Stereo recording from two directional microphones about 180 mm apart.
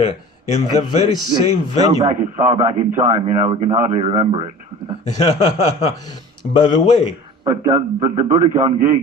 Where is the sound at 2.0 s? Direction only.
40° right (ahead or behind).